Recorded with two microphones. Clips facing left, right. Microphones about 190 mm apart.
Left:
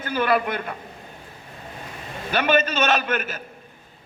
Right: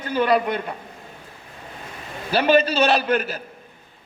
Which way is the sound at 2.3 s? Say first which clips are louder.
Right 3 dB; 35° right (ahead or behind).